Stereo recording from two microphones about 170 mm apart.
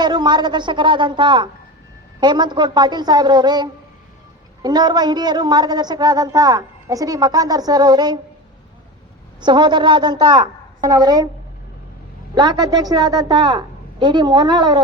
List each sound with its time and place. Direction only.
0.0 s a woman's voice: 25° right (ahead or behind)
9.4 s a woman's voice: 25° right (ahead or behind)
12.3 s a woman's voice: 25° right (ahead or behind)